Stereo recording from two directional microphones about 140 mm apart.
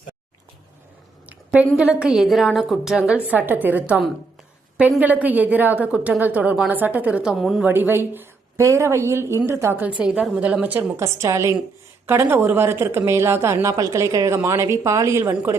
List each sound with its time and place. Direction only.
1.3 s a sound: 10° right (ahead or behind)
1.7 s a woman's voice: 5° right (ahead or behind)
7.7 s a woman's voice: 15° right (ahead or behind)
10.0 s a woman's voice: 5° right (ahead or behind)